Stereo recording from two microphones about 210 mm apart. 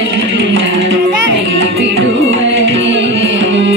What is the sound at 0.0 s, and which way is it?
Music, 60° right (ahead or behind).